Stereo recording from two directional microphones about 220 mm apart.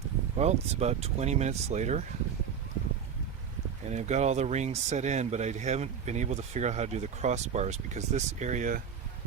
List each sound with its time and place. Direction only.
0.3 s speech: 30° right (ahead or behind)
3.8 s speech: 30° right (ahead or behind)